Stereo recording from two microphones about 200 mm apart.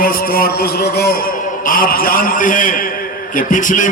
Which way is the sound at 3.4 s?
40° left (ahead or behind).